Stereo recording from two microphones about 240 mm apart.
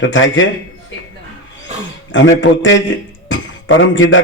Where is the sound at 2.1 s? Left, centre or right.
Left.